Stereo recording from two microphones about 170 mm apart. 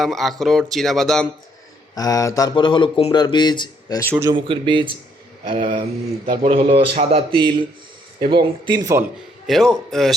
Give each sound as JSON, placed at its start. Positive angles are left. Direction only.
{"t": 0.0, "sound": "speech", "side_deg": 0}
{"t": 2.0, "sound": "speech", "side_deg": 20}
{"t": 4.1, "sound": "speech", "side_deg": -15}
{"t": 4.4, "sound": "speech", "side_deg": -30}
{"t": 9.5, "sound": "speech", "side_deg": 0}